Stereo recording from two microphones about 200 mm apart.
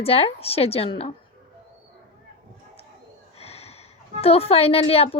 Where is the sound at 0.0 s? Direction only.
30° left (ahead or behind).